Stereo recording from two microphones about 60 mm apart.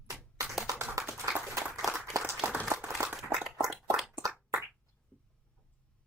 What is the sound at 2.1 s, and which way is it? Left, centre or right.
Applause, right.